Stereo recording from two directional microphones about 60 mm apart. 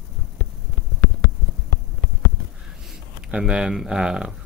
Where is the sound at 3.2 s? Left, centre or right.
Centre.